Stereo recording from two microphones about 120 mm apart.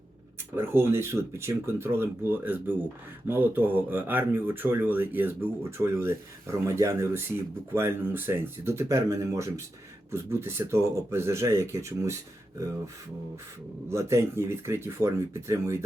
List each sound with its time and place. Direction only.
0.5 s speech: 20° right (ahead or behind)
13.9 s speech: 25° right (ahead or behind)